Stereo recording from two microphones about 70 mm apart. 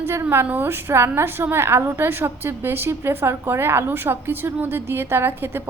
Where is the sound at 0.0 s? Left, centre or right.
Right.